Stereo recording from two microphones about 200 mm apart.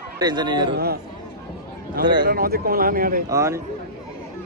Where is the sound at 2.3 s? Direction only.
50° right (ahead or behind).